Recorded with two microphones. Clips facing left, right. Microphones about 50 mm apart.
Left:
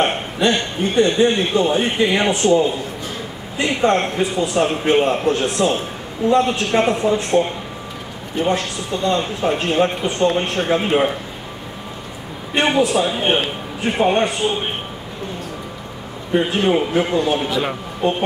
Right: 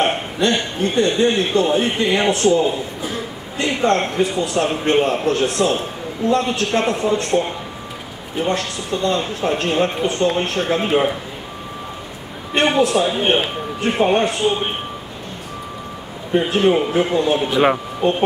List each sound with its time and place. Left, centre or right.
0.0 s a man's voice: centre
12.5 s a man's voice: centre
16.3 s a man's voice: centre
17.5 s a man's voice: right